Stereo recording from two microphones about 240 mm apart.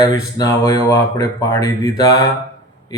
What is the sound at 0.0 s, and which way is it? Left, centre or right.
Speech, centre.